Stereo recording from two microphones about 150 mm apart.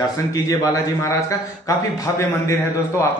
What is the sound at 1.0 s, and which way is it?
A man's voice, 20° left (ahead or behind).